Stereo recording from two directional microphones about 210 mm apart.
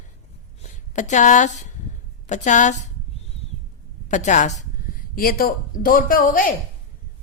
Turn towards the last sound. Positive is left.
turn(degrees=40)  # may be behind; listen again after turning